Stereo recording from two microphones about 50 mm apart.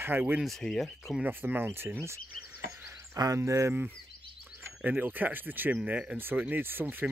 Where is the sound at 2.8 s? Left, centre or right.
Right.